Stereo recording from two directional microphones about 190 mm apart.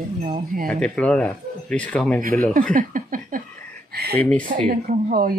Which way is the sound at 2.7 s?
45° right (ahead or behind).